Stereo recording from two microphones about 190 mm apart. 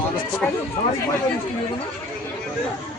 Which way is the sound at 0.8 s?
25° left (ahead or behind).